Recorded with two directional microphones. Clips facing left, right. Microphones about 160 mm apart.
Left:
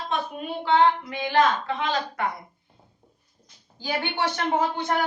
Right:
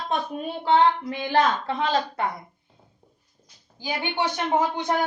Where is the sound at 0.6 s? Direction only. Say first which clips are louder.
Right 1 dB; 35° right (ahead or behind).